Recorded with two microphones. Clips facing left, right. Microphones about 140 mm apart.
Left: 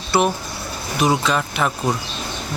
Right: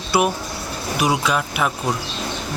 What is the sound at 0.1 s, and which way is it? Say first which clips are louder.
Speech: left 1 dB; 10° right (ahead or behind).